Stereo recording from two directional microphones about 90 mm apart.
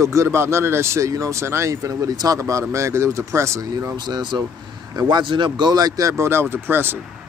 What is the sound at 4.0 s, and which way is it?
Speech, 55° right (ahead or behind).